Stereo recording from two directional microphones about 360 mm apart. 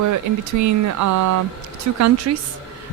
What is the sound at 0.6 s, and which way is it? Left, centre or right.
A woman's voice, right.